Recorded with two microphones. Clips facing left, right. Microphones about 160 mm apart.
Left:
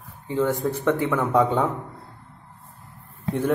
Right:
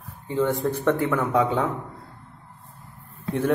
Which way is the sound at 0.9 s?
15° left (ahead or behind).